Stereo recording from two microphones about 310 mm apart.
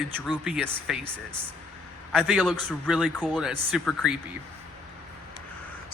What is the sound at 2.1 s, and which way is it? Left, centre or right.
Speech, centre.